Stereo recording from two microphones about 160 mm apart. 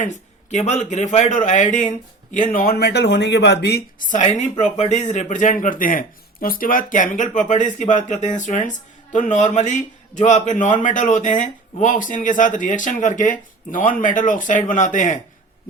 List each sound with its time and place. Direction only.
0.5 s a man's voice: 45° left (ahead or behind); by 3.8 s 90° left
4.1 s a man's voice: 50° left (ahead or behind)